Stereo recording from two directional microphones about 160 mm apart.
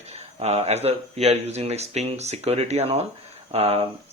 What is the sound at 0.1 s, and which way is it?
Speech, 40° right (ahead or behind).